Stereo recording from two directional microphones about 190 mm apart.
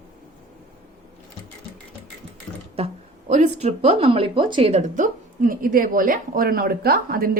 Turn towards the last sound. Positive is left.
turn(degrees=-50)  # may be behind; listen again after turning